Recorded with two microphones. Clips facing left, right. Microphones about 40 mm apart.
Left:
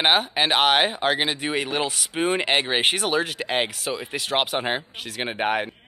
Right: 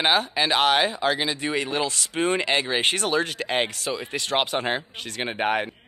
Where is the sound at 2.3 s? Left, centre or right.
Left.